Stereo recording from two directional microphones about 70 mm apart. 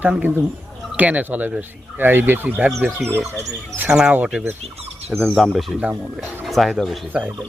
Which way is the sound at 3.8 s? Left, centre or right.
Centre.